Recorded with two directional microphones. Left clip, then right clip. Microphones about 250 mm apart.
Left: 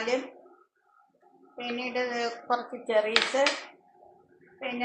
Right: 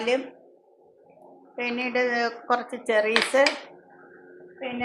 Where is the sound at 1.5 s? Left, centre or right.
Right.